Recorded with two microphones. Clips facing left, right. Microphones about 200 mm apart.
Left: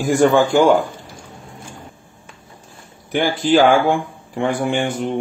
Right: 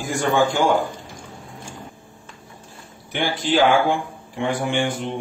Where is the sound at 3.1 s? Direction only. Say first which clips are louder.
Left 6 dB; 40° left (ahead or behind).